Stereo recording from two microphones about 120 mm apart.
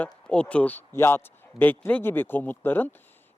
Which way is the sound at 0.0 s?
10° left (ahead or behind).